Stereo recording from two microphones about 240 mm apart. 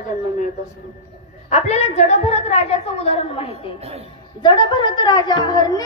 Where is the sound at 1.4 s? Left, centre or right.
Left.